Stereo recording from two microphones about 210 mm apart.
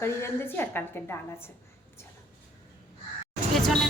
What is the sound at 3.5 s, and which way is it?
Vehicle, centre (ahead or behind).